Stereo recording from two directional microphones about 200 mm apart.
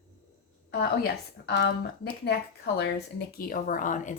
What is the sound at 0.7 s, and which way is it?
Speech, 50° left (ahead or behind).